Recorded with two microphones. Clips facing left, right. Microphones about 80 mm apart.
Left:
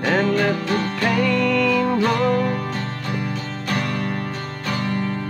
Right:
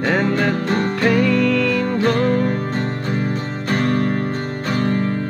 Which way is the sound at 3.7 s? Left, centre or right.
Right.